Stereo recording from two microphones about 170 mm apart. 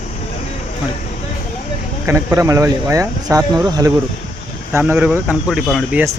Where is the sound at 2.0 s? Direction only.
15° right (ahead or behind).